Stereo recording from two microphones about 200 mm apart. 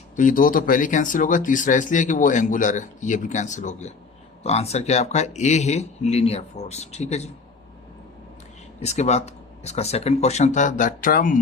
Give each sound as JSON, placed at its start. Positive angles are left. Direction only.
{"t": 0.2, "sound": "speech", "side_deg": 45}
{"t": 8.8, "sound": "speech", "side_deg": 35}